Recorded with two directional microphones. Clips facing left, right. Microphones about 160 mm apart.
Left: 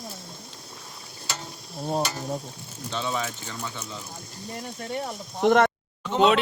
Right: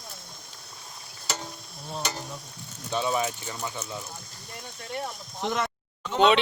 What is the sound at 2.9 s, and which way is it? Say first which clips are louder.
Speech: right 3 dB; 10° right (ahead or behind).